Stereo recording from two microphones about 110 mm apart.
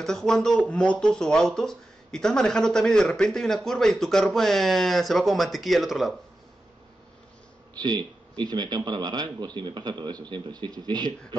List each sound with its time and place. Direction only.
0.0 s speech: 5° left (ahead or behind)
7.8 s speech: 40° right (ahead or behind)